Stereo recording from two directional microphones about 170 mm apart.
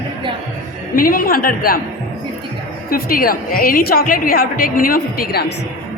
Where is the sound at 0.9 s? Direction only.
55° left (ahead or behind).